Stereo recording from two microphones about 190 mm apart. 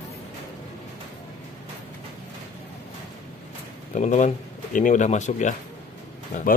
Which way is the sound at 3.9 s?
40° left (ahead or behind).